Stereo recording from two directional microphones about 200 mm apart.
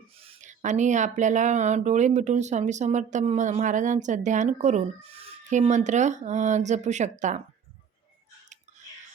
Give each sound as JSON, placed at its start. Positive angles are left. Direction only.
{"t": 0.2, "sound": "speech", "side_deg": -35}